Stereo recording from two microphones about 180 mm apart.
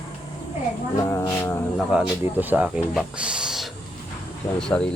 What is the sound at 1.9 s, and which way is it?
Speech, 10° right (ahead or behind).